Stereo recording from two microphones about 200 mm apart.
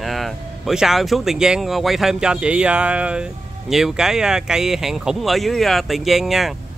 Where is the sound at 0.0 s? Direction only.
Centre (ahead or behind).